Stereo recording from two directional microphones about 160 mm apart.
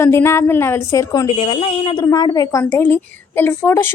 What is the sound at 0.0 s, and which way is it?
A woman's voice, 15° left (ahead or behind).